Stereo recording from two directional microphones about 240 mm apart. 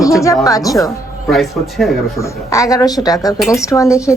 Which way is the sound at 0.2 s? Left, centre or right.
Centre.